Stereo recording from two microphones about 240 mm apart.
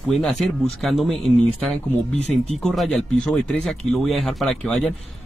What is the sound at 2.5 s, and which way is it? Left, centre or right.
Speech, centre.